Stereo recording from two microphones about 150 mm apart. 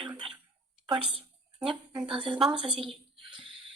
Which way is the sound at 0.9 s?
35° right (ahead or behind).